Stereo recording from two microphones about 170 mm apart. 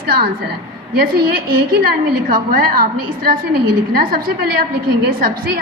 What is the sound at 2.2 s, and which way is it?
Speech, 55° right (ahead or behind).